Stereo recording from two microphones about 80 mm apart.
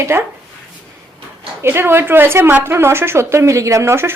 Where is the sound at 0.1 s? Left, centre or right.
Right.